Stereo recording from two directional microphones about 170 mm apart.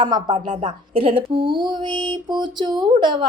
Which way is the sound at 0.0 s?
25° right (ahead or behind).